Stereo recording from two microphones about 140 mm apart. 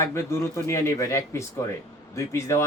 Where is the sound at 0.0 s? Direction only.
20° left (ahead or behind).